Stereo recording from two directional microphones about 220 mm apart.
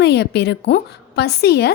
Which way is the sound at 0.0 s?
50° left (ahead or behind).